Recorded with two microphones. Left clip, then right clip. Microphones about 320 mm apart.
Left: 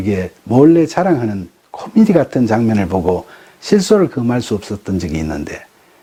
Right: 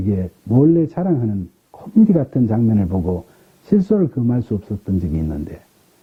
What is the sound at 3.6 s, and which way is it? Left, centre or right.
Speech, centre.